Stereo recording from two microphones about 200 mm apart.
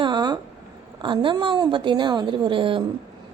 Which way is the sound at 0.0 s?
20° right (ahead or behind).